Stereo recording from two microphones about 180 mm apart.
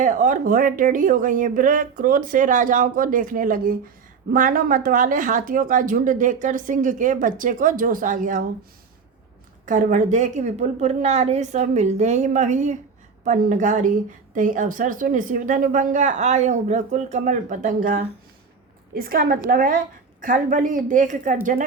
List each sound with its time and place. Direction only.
0.0 s speech: 45° right (ahead or behind)
9.6 s a woman's voice: 45° right (ahead or behind)